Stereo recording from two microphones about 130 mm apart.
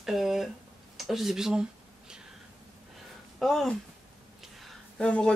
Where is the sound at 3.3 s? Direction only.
Centre (ahead or behind).